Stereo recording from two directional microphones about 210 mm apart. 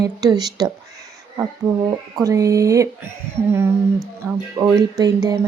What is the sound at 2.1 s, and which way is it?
Speech, 15° right (ahead or behind).